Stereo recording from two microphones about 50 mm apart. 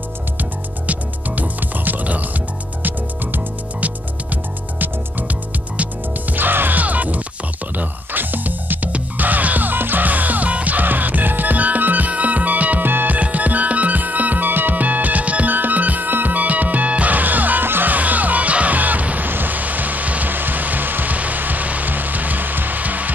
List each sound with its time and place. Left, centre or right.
0.4 s music: right